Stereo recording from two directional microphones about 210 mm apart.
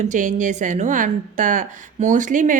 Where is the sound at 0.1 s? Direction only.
35° right (ahead or behind).